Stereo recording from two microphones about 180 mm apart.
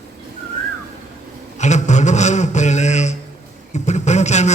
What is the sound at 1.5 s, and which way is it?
A man's voice, 40° left (ahead or behind).